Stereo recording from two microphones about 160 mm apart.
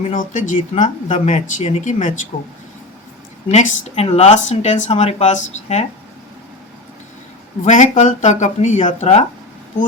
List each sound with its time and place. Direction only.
0.1 s speech: 55° left (ahead or behind)
3.5 s speech: 45° left (ahead or behind)
7.6 s speech: 50° left (ahead or behind)